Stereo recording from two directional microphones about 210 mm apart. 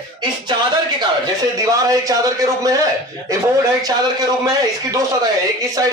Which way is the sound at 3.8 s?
20° right (ahead or behind).